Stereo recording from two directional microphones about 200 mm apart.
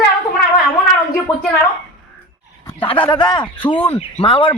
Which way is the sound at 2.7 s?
25° left (ahead or behind).